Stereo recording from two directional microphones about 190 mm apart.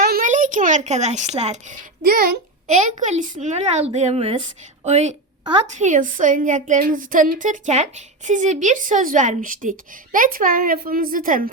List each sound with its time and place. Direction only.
0.0 s a woman's voice: 45° right (ahead or behind)
2.0 s a child's voice: 50° right (ahead or behind)